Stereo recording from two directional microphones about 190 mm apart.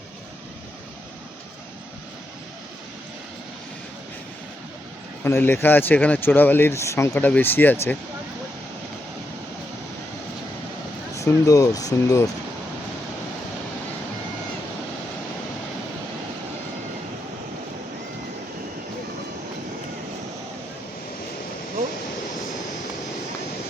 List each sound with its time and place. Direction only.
5.2 s speech: 10° left (ahead or behind)
11.1 s speech: 15° left (ahead or behind)